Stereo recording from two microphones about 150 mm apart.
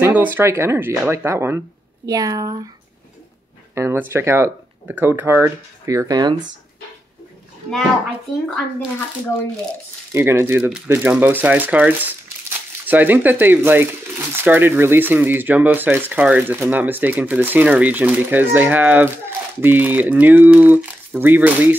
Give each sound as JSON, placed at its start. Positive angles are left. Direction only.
{"t": 0.0, "sound": "speech", "side_deg": -10}
{"t": 3.7, "sound": "speech", "side_deg": -15}
{"t": 10.1, "sound": "speech", "side_deg": -15}